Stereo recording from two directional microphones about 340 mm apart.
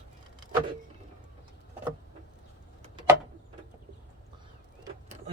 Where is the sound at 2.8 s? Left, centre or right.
Centre.